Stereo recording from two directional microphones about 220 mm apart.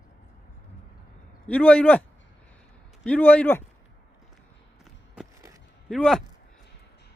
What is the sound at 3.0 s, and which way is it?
Speech, 5° left (ahead or behind).